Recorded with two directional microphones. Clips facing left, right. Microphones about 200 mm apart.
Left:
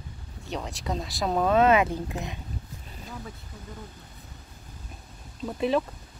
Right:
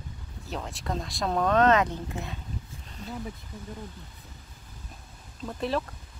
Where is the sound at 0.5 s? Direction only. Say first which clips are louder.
Left 2 dB; centre (ahead or behind).